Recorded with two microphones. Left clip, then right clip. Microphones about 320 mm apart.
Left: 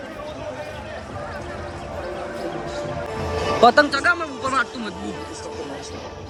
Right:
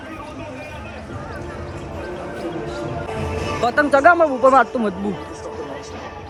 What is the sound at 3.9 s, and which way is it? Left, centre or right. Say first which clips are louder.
A man's voice: right 8 dB; centre.